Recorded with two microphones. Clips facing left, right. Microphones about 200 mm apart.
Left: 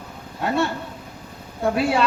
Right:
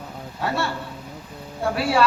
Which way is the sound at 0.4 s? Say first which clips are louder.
Left 4 dB; 20° left (ahead or behind).